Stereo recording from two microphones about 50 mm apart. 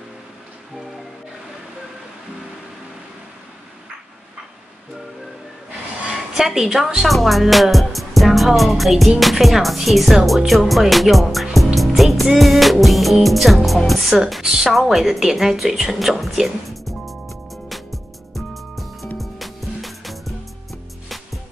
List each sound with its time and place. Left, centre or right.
6.3 s speech: centre
7.9 s music: centre
9.2 s speech: centre
11.5 s music: centre
12.4 s speech: centre
14.4 s a woman's voice: centre
14.7 s a sound: centre
19.1 s music: centre